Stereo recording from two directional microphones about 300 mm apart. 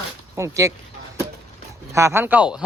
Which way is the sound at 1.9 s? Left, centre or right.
Centre.